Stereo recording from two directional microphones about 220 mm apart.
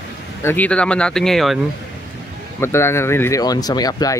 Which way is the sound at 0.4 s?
10° left (ahead or behind).